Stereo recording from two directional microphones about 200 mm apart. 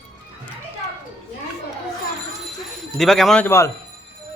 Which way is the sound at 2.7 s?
Centre (ahead or behind).